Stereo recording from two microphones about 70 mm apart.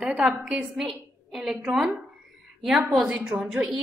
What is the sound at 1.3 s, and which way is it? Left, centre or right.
Speech, centre.